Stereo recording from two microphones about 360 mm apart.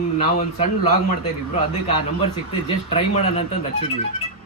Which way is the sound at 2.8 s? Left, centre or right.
Centre.